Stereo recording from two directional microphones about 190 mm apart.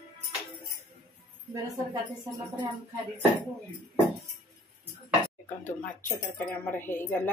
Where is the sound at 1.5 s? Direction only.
20° right (ahead or behind).